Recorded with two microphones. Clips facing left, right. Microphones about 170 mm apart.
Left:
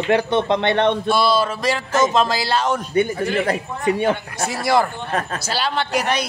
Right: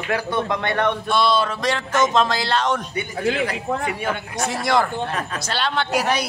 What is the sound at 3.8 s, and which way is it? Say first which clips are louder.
Speech: left 7 dB; 30° left (ahead or behind).